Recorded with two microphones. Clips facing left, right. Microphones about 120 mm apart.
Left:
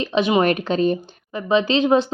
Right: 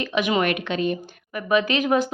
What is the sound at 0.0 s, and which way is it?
A woman's voice, 30° left (ahead or behind).